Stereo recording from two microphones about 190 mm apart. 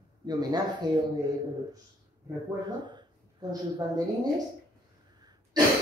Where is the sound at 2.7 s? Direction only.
25° right (ahead or behind).